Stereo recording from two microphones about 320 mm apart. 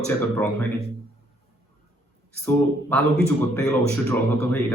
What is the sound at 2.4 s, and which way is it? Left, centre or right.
Speech, centre.